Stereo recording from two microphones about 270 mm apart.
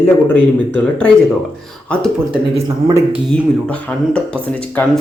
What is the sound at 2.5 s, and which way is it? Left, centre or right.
Speech, centre.